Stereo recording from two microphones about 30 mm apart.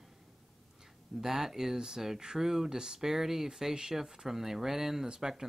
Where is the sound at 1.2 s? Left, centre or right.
Centre.